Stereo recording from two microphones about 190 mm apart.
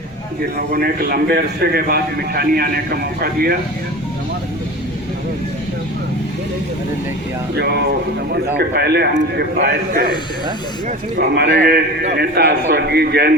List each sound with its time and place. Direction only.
0.7 s a man's voice: 55° right (ahead or behind)
7.5 s a man's voice: 60° right (ahead or behind)
11.2 s a man's voice: 55° right (ahead or behind)